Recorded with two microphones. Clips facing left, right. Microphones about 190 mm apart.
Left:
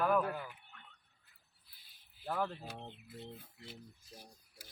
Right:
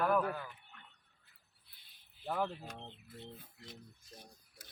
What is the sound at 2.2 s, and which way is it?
Speech, centre (ahead or behind).